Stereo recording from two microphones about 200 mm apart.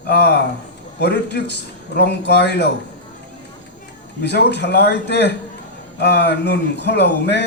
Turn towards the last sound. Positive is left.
turn(degrees=55)  # may be behind; listen again after turning